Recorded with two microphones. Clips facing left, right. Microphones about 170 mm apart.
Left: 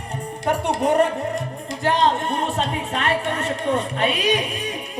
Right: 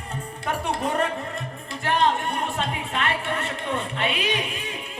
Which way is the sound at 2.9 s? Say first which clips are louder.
Left 4 dB; 40° left (ahead or behind).